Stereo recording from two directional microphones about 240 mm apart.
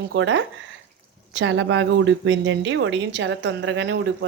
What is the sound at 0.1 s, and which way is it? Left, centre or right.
A woman's voice, right.